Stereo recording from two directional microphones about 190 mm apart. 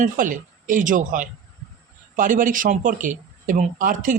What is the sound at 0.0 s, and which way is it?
Speech, 45° right (ahead or behind).